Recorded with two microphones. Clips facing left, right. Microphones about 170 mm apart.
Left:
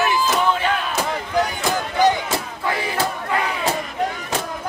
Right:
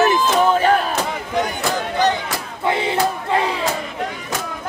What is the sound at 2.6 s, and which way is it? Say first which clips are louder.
Battle cry: right 7 dB; 25° right (ahead or behind).